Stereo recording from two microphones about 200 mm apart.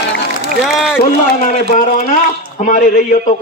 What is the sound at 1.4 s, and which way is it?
Speech, 40° left (ahead or behind).